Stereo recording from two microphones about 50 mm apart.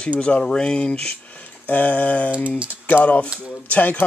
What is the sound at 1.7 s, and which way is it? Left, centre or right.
Speech, left.